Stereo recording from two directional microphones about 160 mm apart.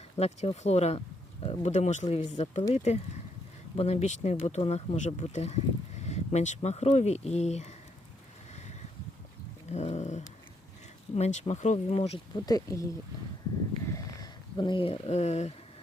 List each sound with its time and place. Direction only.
0.2 s speech: 40° left (ahead or behind)
9.6 s speech: 45° left (ahead or behind)
12.5 s speech: 20° left (ahead or behind)
13.9 s a sound: 25° left (ahead or behind); by 15.5 s 45° left (ahead or behind)